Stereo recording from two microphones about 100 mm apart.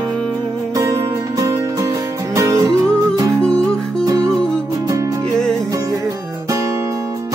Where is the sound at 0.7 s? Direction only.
30° right (ahead or behind).